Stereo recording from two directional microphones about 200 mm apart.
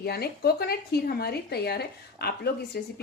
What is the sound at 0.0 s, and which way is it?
Speech, 50° left (ahead or behind).